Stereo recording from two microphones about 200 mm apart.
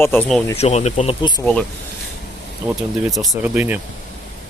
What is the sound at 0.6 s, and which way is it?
Speech, 35° left (ahead or behind).